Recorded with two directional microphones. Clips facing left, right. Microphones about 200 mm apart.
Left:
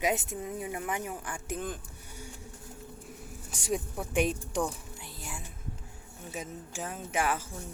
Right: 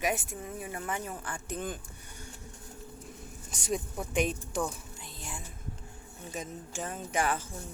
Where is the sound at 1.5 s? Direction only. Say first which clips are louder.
Even; centre (ahead or behind).